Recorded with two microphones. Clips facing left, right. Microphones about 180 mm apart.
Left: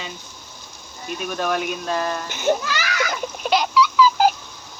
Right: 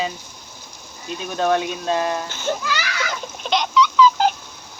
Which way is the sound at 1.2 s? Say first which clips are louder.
Right 4 dB; 25° right (ahead or behind).